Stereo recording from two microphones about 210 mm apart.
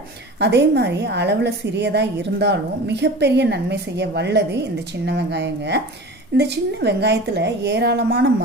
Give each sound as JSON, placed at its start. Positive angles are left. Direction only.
{"t": 0.3, "sound": "a woman's voice", "side_deg": -55}